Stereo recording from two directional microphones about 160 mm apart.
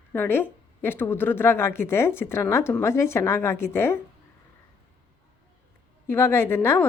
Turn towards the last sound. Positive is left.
turn(degrees=15)  # may be behind; listen again after turning